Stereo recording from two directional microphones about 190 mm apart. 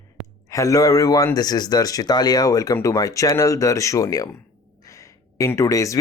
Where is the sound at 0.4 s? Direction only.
15° left (ahead or behind).